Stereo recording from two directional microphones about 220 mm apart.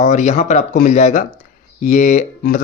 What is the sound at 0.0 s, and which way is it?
Speech, 35° left (ahead or behind).